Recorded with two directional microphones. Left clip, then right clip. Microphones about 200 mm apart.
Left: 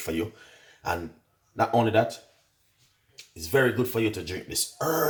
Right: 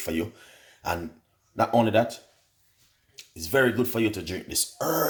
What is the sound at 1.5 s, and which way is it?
Speech, 40° right (ahead or behind).